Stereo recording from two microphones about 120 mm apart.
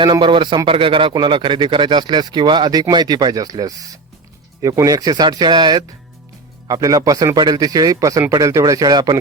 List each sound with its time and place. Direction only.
0.0 s a man's voice: 40° right (ahead or behind)